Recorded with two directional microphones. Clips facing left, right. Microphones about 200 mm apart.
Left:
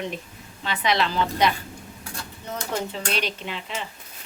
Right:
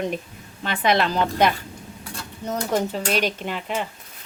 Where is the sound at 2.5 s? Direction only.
40° right (ahead or behind).